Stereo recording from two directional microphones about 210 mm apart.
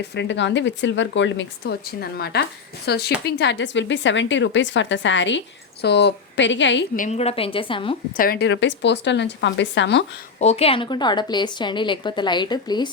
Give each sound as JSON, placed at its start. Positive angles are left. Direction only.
{"t": 0.0, "sound": "speech", "side_deg": 55}
{"t": 6.9, "sound": "a woman's voice", "side_deg": 35}
{"t": 8.1, "sound": "speech", "side_deg": 45}
{"t": 10.4, "sound": "a woman's voice", "side_deg": 30}